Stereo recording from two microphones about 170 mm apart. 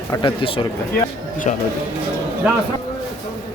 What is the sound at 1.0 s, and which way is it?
Speech, 50° left (ahead or behind).